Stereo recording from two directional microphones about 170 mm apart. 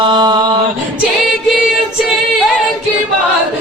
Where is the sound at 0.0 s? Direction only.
25° right (ahead or behind).